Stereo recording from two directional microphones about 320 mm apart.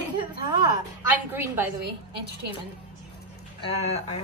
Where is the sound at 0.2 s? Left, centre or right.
Centre.